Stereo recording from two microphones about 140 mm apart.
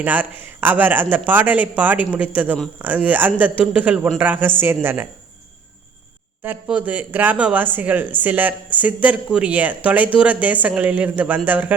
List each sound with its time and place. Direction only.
0.0 s speech: 10° right (ahead or behind)
6.4 s speech: 10° right (ahead or behind)